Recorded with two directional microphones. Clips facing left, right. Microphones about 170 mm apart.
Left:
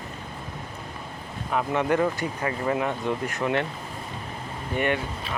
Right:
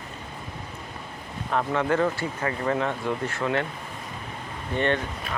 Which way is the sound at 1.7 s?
20° left (ahead or behind).